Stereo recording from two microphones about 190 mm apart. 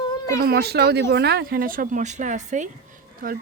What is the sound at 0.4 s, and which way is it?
A woman's voice, 55° right (ahead or behind).